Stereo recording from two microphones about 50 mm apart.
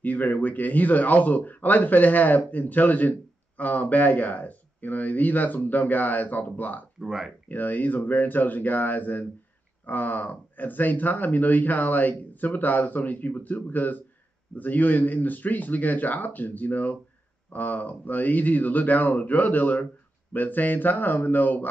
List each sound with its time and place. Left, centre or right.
0.0 s a man's voice: left
7.1 s speech: centre
7.4 s a man's voice: left